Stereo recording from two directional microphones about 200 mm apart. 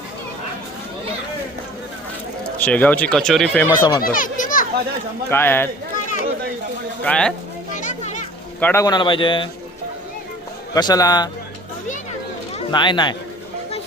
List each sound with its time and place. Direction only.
2.6 s speech: 10° left (ahead or behind)
3.8 s a man's voice: 20° left (ahead or behind)
4.0 s children playing: 45° left (ahead or behind)
5.3 s speech: 10° left (ahead or behind)
7.0 s speech: 5° left (ahead or behind)
7.8 s children playing: 40° left (ahead or behind)
8.6 s a man's voice: 15° left (ahead or behind)
10.8 s a man's voice: 20° left (ahead or behind)
12.5 s speech: 25° left (ahead or behind)